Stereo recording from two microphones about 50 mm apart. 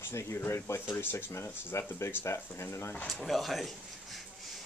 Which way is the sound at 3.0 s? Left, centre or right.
Centre.